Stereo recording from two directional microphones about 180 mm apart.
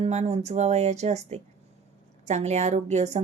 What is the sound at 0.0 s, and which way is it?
Speech, 40° right (ahead or behind).